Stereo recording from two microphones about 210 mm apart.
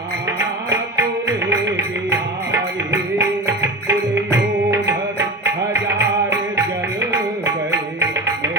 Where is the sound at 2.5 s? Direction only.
15° right (ahead or behind).